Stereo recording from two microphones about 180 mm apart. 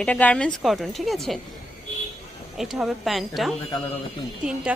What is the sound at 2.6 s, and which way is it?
Speech, centre (ahead or behind).